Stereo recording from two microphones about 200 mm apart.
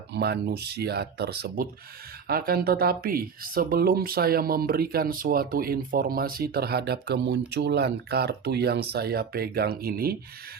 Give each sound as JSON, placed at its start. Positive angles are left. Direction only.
{"t": 0.1, "sound": "speech", "side_deg": -55}